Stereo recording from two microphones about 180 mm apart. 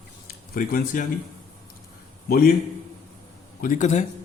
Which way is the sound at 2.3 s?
50° left (ahead or behind).